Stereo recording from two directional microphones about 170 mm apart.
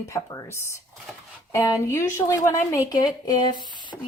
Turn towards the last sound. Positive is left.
turn(degrees=25)  # may be behind; listen again after turning